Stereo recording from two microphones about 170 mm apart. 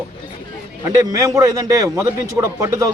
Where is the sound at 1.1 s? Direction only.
20° right (ahead or behind).